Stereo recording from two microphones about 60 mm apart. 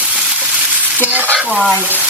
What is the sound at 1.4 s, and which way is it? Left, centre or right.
Frying, centre.